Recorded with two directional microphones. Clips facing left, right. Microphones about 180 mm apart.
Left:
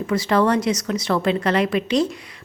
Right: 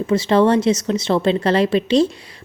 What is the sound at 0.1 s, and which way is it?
A woman's voice, 25° right (ahead or behind).